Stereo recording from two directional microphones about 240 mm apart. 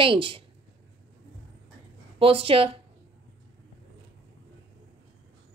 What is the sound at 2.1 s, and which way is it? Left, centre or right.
Speech, right.